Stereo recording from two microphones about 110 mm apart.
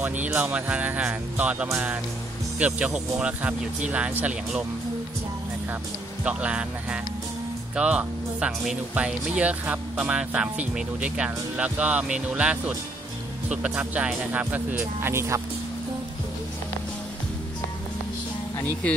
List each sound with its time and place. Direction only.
0.0 s speech: 15° right (ahead or behind)
6.2 s speech: 10° right (ahead or behind)